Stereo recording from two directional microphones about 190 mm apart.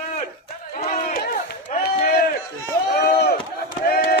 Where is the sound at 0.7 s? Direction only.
40° left (ahead or behind).